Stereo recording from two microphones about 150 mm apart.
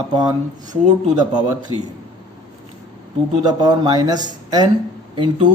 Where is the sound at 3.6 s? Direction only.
30° right (ahead or behind).